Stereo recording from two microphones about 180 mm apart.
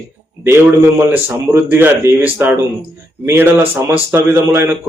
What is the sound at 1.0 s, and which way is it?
Speech, 10° right (ahead or behind).